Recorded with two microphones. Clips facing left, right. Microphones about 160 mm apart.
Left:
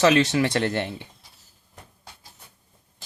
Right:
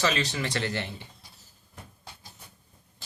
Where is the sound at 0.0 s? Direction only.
60° left (ahead or behind).